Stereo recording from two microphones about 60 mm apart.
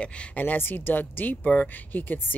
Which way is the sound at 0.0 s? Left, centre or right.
Left.